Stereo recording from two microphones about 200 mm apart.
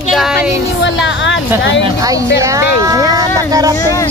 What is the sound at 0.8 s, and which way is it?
Speech, 65° left (ahead or behind).